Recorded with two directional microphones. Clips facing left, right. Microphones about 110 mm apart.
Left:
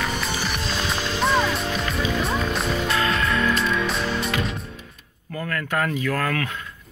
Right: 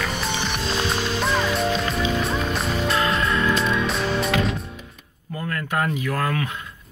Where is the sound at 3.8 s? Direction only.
Centre (ahead or behind).